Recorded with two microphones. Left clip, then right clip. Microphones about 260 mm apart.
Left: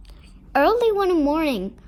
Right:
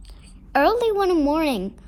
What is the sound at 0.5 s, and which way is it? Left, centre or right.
A woman's voice, right.